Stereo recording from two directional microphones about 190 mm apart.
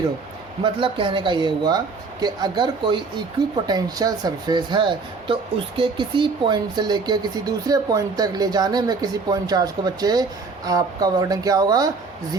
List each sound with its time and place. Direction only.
0.6 s speech: 25° right (ahead or behind)